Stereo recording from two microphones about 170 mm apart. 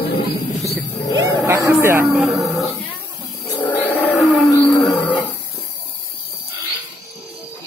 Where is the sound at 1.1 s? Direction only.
20° right (ahead or behind).